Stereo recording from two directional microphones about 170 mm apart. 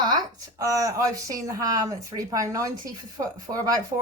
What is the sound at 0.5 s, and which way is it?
Speech, 20° right (ahead or behind).